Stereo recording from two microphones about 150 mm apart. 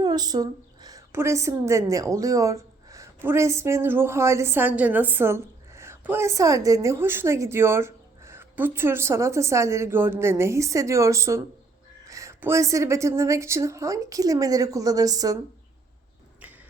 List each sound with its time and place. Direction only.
0.0 s a woman's voice: 25° right (ahead or behind)